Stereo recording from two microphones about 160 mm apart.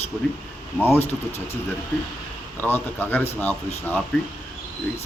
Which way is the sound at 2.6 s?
10° left (ahead or behind).